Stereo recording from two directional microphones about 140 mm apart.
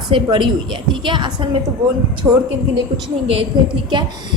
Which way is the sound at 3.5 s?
35° right (ahead or behind).